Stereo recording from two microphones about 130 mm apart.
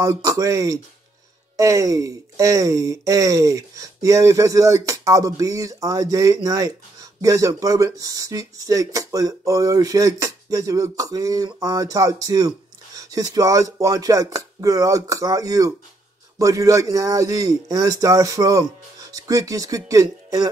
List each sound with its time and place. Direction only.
0.0 s speech: 25° right (ahead or behind)